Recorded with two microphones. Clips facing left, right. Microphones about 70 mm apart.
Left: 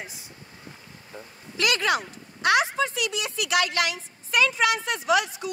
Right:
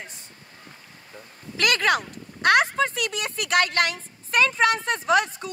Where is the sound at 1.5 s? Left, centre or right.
Right.